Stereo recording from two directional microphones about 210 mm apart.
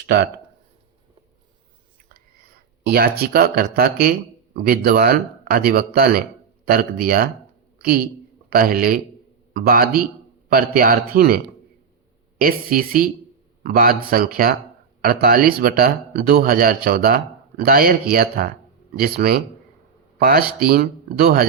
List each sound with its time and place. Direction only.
2.1 s a man's voice: 45° right (ahead or behind)
12.4 s a man's voice: 45° right (ahead or behind)